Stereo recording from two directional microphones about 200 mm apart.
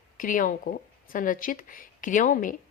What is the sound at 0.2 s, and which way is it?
Speech, 40° left (ahead or behind).